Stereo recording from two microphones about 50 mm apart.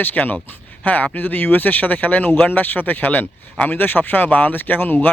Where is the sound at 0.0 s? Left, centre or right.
Left.